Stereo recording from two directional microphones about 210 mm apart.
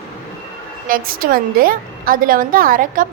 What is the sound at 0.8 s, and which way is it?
A woman's voice, 40° right (ahead or behind).